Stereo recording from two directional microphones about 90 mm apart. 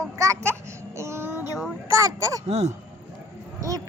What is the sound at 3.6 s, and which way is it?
Speech, 40° right (ahead or behind).